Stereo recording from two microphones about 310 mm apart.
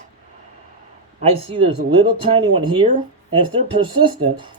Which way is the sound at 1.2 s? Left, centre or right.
Centre.